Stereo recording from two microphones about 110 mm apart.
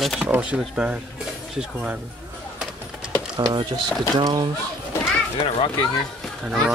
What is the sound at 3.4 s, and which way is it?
Speech, 40° right (ahead or behind).